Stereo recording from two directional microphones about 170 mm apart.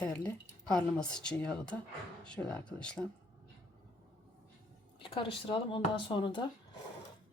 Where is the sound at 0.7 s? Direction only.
5° left (ahead or behind).